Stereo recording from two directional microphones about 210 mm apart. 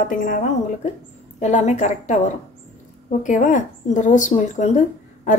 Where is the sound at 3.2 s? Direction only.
35° left (ahead or behind).